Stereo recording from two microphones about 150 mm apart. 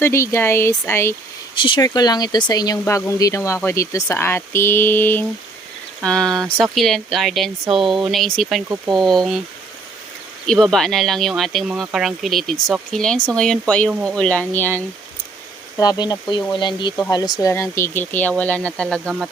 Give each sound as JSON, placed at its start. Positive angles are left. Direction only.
{"t": 0.0, "sound": "speech", "side_deg": 20}
{"t": 1.5, "sound": "speech", "side_deg": 30}
{"t": 10.4, "sound": "speech", "side_deg": 5}
{"t": 15.8, "sound": "speech", "side_deg": 25}